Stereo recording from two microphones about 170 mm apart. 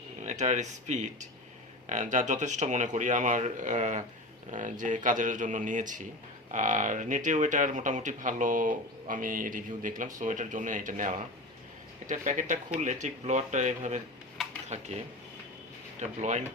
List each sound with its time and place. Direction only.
0.2 s speech: 45° right (ahead or behind)